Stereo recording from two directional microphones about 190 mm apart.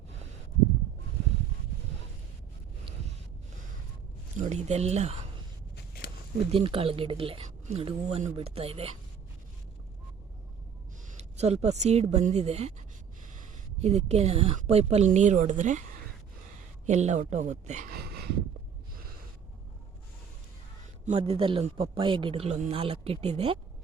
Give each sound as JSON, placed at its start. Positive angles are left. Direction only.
{"t": 4.4, "sound": "speech", "side_deg": -35}
{"t": 6.5, "sound": "speech", "side_deg": -30}
{"t": 11.1, "sound": "speech", "side_deg": -35}
{"t": 13.8, "sound": "speech", "side_deg": -35}
{"t": 16.8, "sound": "speech", "side_deg": -35}
{"t": 17.9, "sound": "a sound", "side_deg": -55}
{"t": 21.0, "sound": "speech", "side_deg": -30}